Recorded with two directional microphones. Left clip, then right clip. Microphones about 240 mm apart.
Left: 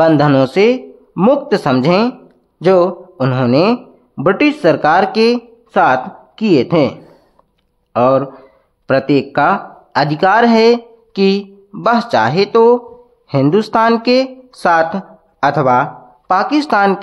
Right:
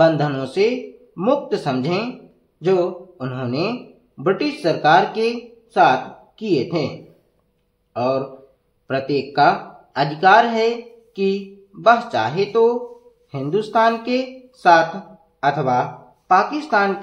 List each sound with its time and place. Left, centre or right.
0.0 s speech: left
7.9 s a man's voice: left